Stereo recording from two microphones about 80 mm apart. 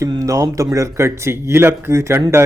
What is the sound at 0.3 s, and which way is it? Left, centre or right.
A man's voice, right.